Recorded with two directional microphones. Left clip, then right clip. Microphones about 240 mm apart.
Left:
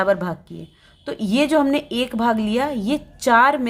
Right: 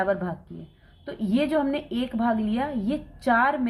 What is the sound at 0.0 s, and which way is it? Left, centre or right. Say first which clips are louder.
A woman's voice: left 6 dB; left.